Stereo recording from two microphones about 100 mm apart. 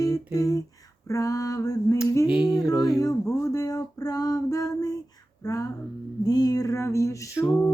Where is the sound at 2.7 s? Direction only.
35° left (ahead or behind).